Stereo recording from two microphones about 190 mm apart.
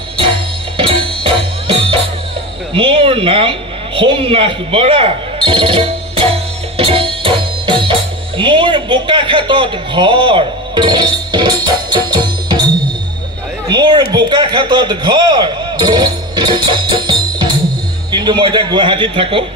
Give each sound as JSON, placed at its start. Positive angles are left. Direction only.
{"t": 0.7, "sound": "music", "side_deg": -25}
{"t": 2.7, "sound": "speech", "side_deg": -30}
{"t": 6.8, "sound": "music", "side_deg": -30}
{"t": 8.4, "sound": "a man's voice", "side_deg": -25}
{"t": 13.7, "sound": "a man's voice", "side_deg": -20}